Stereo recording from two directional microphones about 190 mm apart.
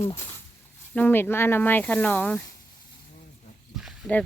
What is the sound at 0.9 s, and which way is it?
Speech, 10° left (ahead or behind).